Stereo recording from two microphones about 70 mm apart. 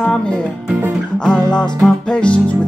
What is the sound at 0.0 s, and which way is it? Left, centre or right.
Music, centre.